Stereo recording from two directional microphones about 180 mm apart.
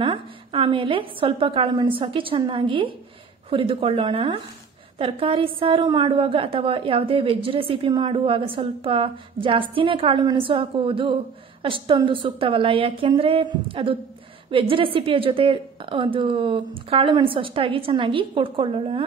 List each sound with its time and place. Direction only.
0.0 s a woman's voice: 30° right (ahead or behind)